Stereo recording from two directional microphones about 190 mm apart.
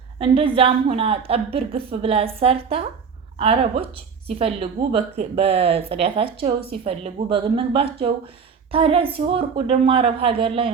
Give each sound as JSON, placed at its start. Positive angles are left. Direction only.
{"t": 0.2, "sound": "a woman's voice", "side_deg": -30}